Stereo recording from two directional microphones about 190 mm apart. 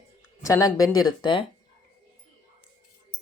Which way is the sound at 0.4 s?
15° left (ahead or behind).